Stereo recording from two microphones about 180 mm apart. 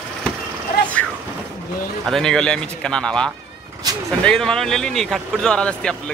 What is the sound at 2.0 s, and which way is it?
Speech, centre (ahead or behind).